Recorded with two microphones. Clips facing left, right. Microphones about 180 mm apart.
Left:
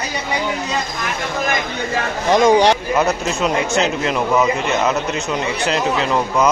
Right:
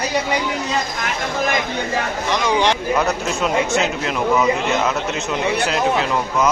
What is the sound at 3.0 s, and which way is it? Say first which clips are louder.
Speech: left 2 dB; centre (ahead or behind).